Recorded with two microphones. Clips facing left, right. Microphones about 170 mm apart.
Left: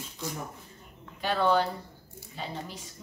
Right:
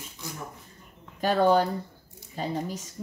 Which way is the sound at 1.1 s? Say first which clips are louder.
Right 4 dB; 45° right (ahead or behind).